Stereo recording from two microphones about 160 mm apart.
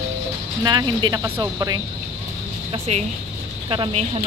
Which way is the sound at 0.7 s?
25° right (ahead or behind).